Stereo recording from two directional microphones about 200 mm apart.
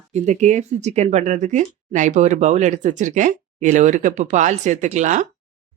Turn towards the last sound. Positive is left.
turn(degrees=-35)  # may be behind; listen again after turning